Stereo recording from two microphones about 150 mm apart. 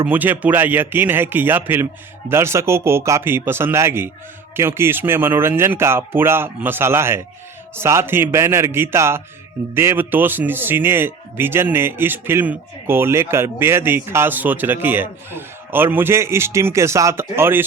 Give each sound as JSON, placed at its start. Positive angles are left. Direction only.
{"t": 0.0, "sound": "a man's voice", "side_deg": -10}